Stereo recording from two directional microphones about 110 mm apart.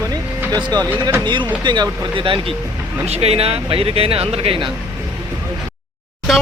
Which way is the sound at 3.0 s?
70° right (ahead or behind).